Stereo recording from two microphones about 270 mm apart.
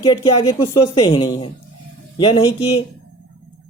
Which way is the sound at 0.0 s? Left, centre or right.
Centre.